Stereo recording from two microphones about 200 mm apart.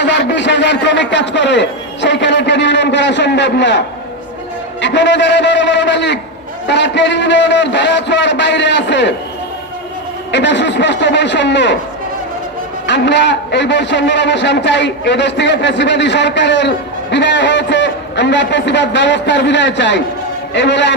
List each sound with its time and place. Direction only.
0.0 s a man's voice: 60° left (ahead or behind)
10.3 s a man's voice: 60° left (ahead or behind)
12.9 s a man's voice: 60° left (ahead or behind)